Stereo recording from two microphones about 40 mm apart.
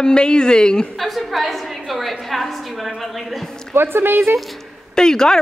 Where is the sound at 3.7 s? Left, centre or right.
Right.